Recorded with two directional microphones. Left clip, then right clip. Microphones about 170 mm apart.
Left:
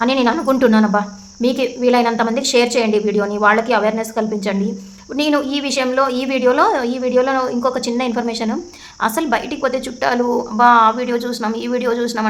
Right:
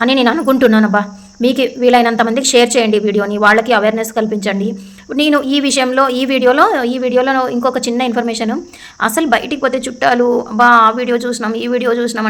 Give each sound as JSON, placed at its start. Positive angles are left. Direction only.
{"t": 0.0, "sound": "a woman's voice", "side_deg": -25}